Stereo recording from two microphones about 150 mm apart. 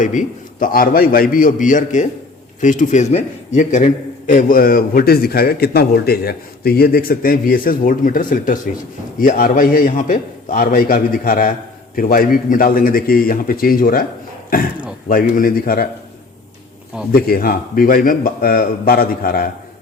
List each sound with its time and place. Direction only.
0.0 s a man's voice: 55° left (ahead or behind); by 14.0 s 75° left (ahead or behind)
15.0 s a man's voice: 70° left (ahead or behind)
17.1 s a man's voice: 75° left (ahead or behind)